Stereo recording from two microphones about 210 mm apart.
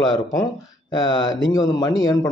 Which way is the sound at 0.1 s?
15° left (ahead or behind).